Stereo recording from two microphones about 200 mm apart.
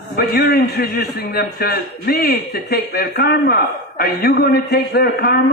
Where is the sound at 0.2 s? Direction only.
50° left (ahead or behind).